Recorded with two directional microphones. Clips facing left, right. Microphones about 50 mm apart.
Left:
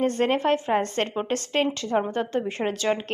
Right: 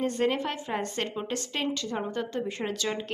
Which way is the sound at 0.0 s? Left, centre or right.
Left.